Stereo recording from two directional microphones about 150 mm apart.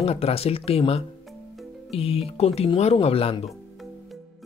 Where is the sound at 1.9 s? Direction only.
40° left (ahead or behind).